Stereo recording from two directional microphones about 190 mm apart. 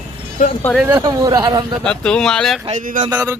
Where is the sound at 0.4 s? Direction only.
40° left (ahead or behind).